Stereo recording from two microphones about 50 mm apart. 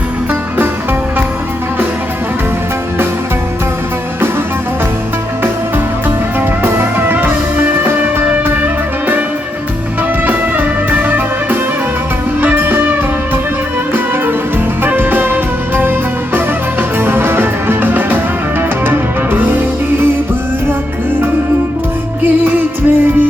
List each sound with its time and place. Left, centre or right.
5.4 s music: right
10.2 s music: right
14.8 s music: right
22.2 s music: right